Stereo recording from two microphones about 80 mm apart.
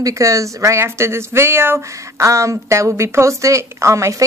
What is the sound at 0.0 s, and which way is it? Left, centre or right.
Speech, right.